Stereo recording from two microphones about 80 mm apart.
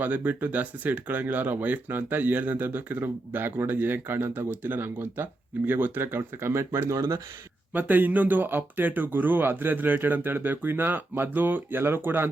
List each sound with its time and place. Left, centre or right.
0.0 s speech: right
7.7 s speech: right